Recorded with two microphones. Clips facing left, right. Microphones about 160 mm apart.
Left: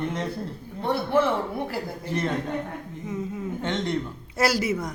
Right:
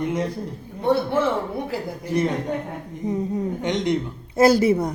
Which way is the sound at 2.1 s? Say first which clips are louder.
Right 6 dB; 10° right (ahead or behind).